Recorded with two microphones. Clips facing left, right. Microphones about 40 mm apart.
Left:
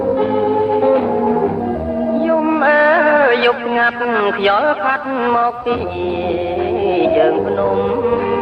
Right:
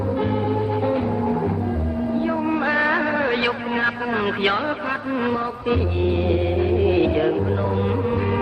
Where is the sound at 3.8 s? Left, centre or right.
Left.